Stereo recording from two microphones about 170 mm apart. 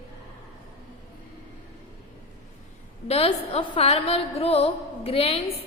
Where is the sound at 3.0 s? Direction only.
35° left (ahead or behind).